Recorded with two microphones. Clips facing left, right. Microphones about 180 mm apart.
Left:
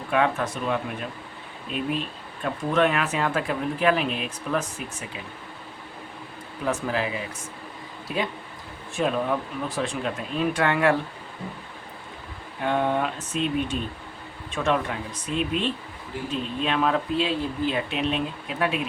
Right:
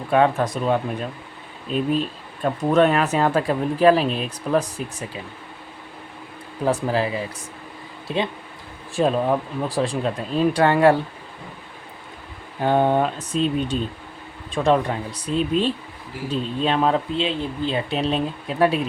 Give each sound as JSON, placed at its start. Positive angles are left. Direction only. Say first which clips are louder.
{"t": 0.1, "sound": "speech", "louder": "right 5 dB", "side_deg": -35}
{"t": 6.7, "sound": "speech", "louder": "right 5 dB", "side_deg": -35}
{"t": 12.6, "sound": "speech", "louder": "right 5 dB", "side_deg": -35}